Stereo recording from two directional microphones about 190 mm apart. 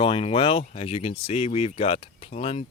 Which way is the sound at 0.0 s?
30° left (ahead or behind).